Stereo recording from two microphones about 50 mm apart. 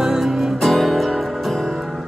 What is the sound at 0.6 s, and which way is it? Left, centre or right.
Music, centre.